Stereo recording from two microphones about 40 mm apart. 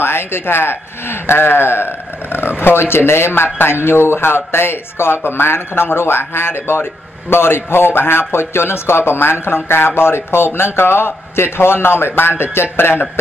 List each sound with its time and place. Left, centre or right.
0.0 s speech: left
2.3 s speech: left